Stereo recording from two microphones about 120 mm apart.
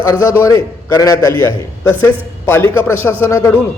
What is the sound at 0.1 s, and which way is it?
A man's voice, 25° left (ahead or behind).